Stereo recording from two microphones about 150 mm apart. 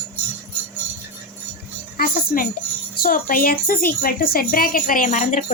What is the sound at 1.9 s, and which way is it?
A woman's voice, 75° left (ahead or behind).